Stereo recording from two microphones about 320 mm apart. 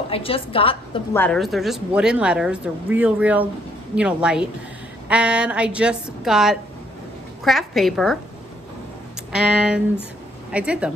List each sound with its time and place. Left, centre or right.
0.1 s a woman's voice: centre
1.2 s speech: centre
9.3 s speech: centre